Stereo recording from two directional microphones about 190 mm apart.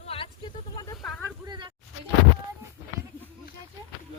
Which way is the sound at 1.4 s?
25° right (ahead or behind).